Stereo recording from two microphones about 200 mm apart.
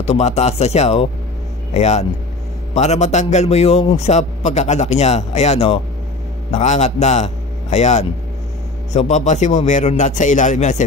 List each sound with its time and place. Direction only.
0.0 s a man's voice: 35° left (ahead or behind)